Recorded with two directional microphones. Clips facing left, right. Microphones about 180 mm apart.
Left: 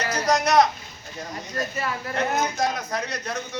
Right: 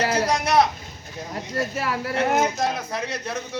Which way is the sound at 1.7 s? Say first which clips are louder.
Right 3 dB; 80° right.